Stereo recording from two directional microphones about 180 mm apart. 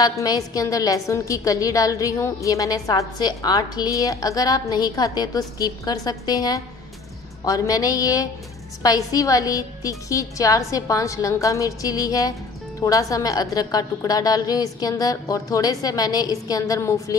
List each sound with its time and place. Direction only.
0.0 s a woman's voice: 20° left (ahead or behind)